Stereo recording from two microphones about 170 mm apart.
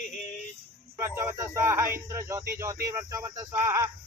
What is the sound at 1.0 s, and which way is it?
Speech, 15° right (ahead or behind).